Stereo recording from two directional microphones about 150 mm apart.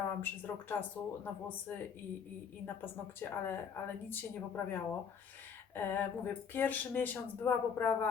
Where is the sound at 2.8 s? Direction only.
15° left (ahead or behind).